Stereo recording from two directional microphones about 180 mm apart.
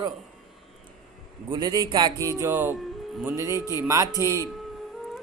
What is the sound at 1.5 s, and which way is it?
Speech, 20° right (ahead or behind).